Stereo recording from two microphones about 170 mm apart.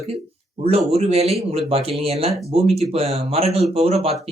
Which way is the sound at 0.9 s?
35° right (ahead or behind).